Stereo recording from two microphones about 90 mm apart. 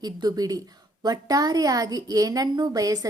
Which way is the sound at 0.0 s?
50° right (ahead or behind).